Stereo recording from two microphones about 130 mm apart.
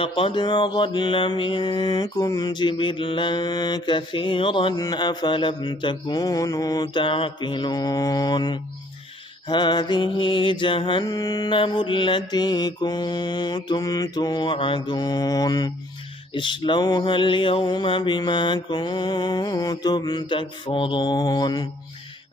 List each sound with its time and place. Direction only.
0.0 s mantra: 40° left (ahead or behind)